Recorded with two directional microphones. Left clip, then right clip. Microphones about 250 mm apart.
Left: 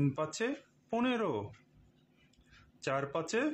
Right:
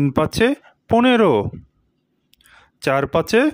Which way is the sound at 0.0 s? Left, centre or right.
Right.